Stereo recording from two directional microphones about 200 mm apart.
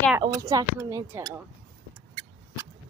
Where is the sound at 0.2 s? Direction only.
15° right (ahead or behind).